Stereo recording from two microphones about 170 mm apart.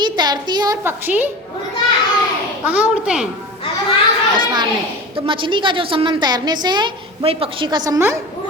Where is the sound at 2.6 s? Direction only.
5° right (ahead or behind).